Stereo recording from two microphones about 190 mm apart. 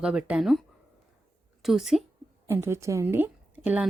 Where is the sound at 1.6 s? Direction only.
Centre (ahead or behind).